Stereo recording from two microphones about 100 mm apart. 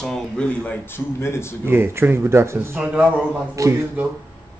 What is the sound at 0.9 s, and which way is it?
Speech, 25° left (ahead or behind).